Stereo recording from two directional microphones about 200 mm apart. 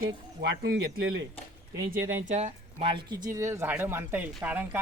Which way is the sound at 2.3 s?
35° right (ahead or behind).